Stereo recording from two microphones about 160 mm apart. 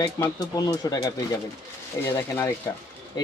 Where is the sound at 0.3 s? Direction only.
25° left (ahead or behind).